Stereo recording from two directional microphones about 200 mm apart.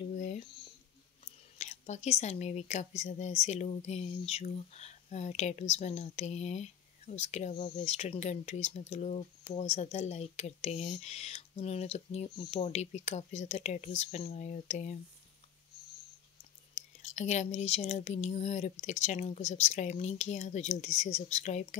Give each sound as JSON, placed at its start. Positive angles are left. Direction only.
{"t": 1.6, "sound": "speech", "side_deg": 35}
{"t": 16.7, "sound": "whispering", "side_deg": 35}
{"t": 17.6, "sound": "speech", "side_deg": 30}